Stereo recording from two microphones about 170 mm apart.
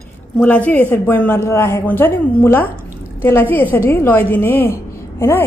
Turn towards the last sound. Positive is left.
turn(degrees=15)  # may be behind; listen again after turning